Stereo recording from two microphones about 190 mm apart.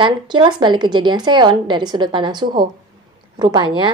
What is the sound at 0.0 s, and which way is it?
A woman's voice, 25° right (ahead or behind).